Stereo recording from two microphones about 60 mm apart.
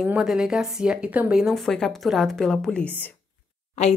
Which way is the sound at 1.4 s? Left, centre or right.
Centre.